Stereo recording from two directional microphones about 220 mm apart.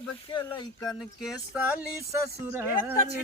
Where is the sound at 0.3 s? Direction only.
20° left (ahead or behind).